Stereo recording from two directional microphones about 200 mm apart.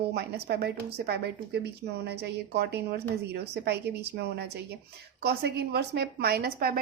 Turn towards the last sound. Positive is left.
turn(degrees=-50)  # may be behind; listen again after turning